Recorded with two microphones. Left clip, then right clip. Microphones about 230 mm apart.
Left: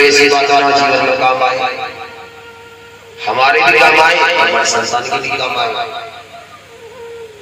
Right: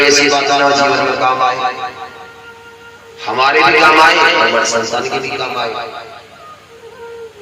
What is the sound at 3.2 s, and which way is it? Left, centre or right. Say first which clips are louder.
A man's voice: left 1 dB; right.